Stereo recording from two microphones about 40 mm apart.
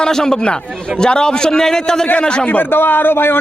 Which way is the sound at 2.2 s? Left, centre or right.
Left.